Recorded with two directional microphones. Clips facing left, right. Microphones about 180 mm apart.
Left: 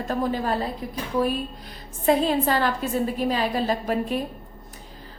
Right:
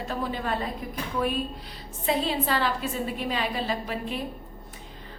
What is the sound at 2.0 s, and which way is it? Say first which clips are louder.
A woman's voice: left 6 dB; 45° left (ahead or behind).